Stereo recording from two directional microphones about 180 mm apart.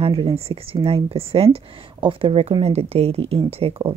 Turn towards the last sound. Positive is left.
turn(degrees=-35)  # may be behind; listen again after turning